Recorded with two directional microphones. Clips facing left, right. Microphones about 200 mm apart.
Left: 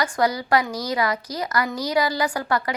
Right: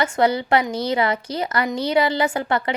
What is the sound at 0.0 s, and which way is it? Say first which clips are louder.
A woman's voice: right 3 dB; 25° right (ahead or behind).